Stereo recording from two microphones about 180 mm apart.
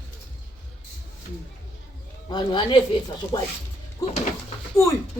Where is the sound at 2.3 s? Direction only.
25° left (ahead or behind).